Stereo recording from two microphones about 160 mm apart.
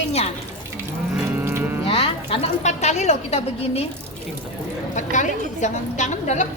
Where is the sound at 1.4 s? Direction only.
15° right (ahead or behind).